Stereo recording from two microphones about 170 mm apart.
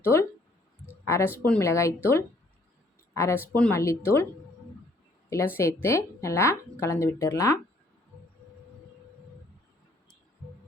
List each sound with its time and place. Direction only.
0.0 s a woman's voice: 15° left (ahead or behind)
5.3 s a woman's voice: 15° left (ahead or behind)